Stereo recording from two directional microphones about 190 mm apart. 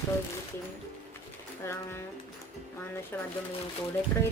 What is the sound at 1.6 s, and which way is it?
Speech, 15° left (ahead or behind).